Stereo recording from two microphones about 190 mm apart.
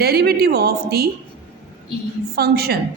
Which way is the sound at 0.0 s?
55° right (ahead or behind).